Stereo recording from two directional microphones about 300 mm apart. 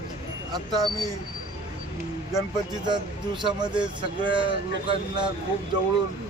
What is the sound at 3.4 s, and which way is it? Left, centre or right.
A man's voice, centre.